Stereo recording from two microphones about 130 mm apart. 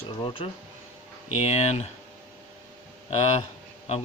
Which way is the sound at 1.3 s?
55° left (ahead or behind).